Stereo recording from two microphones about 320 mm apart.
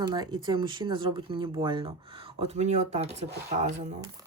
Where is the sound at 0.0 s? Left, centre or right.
Centre.